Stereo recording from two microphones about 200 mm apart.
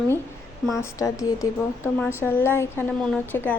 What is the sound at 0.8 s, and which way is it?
A woman's voice, 15° left (ahead or behind).